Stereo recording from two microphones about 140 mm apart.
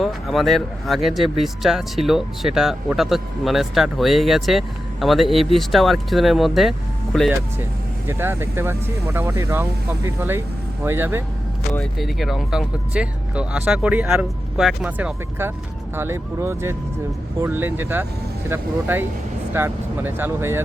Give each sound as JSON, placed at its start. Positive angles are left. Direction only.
{"t": 0.0, "sound": "speech", "side_deg": 0}
{"t": 8.0, "sound": "speech", "side_deg": -15}
{"t": 11.8, "sound": "speech", "side_deg": 0}